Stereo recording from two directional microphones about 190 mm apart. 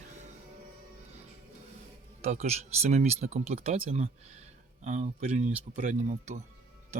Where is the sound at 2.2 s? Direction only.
35° right (ahead or behind).